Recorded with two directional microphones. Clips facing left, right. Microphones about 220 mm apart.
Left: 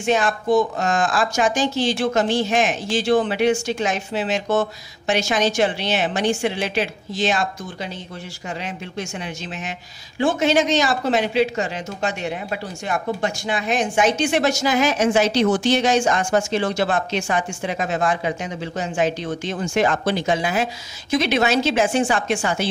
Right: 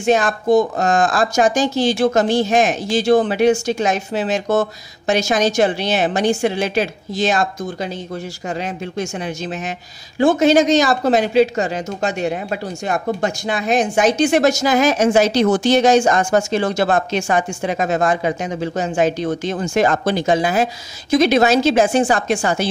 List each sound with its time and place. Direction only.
0.0 s a man's voice: 40° right (ahead or behind)